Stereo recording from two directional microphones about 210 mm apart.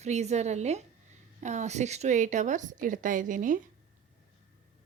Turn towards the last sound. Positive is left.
turn(degrees=-40)  # may be behind; listen again after turning